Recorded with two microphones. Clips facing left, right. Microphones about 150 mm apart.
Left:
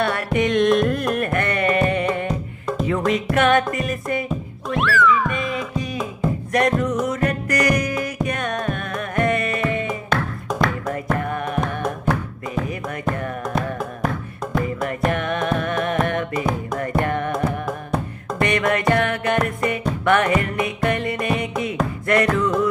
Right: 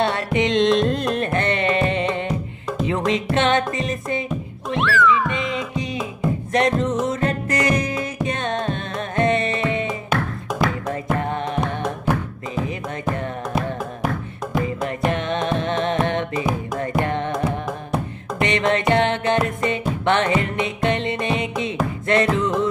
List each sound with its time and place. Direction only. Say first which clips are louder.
0.0 s music: even; 25° right (ahead or behind)
4.7 s music: even; centre (ahead or behind)
5.3 s music: even; 20° right (ahead or behind)
10.0 s music: even; 5° right (ahead or behind)
10.9 s music: even; 25° right (ahead or behind)
12.1 s music: even; 15° right (ahead or behind)
13.6 s music: even; 5° right (ahead or behind)
15.0 s music: even; 25° right (ahead or behind)
18.4 s music: even; 25° right (ahead or behind)